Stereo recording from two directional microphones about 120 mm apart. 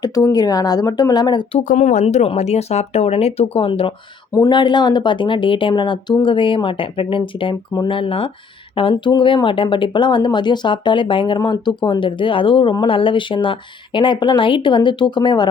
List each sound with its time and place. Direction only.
0.0 s speech: 30° left (ahead or behind)
1.7 s speech: 90° left; by 3.9 s 50° left (ahead or behind)
4.3 s speech: 25° left (ahead or behind)
4.5 s speech: 40° left (ahead or behind)